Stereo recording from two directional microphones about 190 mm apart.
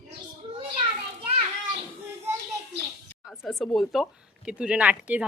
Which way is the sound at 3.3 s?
Centre (ahead or behind).